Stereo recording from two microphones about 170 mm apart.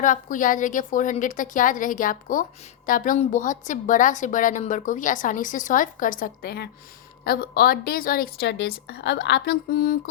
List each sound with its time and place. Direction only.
0.0 s a woman's voice: 50° left (ahead or behind)